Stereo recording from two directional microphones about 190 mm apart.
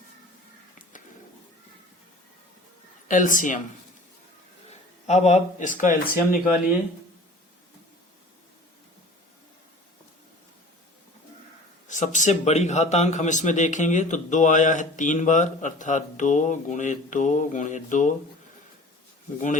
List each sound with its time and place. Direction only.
3.1 s speech: 45° left (ahead or behind)
4.7 s speech: 35° left (ahead or behind)
11.9 s a man's voice: 40° left (ahead or behind)